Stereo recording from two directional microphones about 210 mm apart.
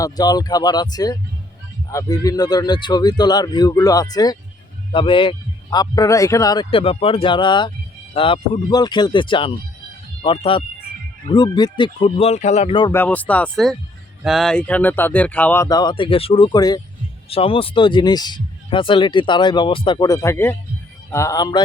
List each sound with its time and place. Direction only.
0.0 s speech: 20° left (ahead or behind)
12.9 s speech: 10° left (ahead or behind)